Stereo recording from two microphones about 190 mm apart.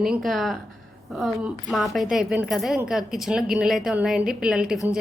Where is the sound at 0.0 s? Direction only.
Centre (ahead or behind).